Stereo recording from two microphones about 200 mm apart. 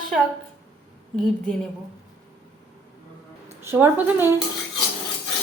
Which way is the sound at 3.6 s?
10° right (ahead or behind).